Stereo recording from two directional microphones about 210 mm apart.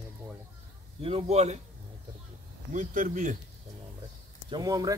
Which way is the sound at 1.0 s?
30° right (ahead or behind).